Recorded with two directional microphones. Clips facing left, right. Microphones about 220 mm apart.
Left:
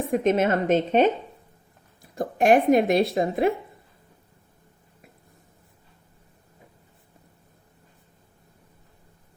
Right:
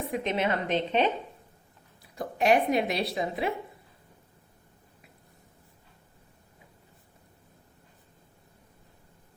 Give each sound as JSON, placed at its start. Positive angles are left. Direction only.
{"t": 0.1, "sound": "speech", "side_deg": 45}